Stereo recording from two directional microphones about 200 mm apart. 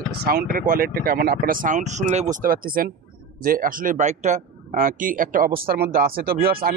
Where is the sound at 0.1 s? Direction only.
50° right (ahead or behind).